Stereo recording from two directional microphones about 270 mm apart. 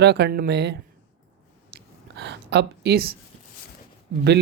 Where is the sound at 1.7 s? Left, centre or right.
Right.